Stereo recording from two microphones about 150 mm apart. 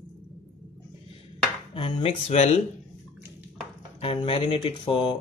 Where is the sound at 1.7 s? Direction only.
40° left (ahead or behind).